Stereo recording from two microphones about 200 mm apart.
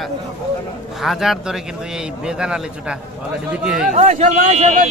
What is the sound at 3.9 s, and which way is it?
Speech, 35° right (ahead or behind).